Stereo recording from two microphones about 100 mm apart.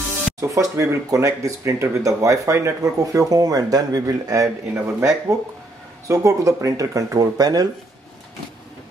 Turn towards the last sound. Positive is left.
turn(degrees=-40)  # may be behind; listen again after turning